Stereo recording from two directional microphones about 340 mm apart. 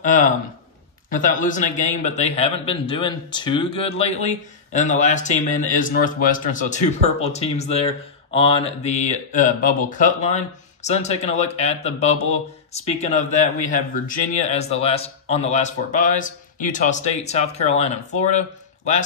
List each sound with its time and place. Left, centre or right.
0.0 s speech: left